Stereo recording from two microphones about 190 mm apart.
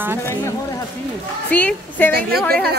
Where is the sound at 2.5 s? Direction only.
55° right (ahead or behind).